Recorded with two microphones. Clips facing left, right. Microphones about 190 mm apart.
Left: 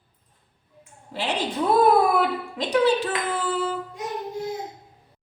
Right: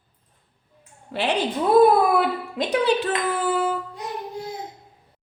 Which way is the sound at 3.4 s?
60° right (ahead or behind).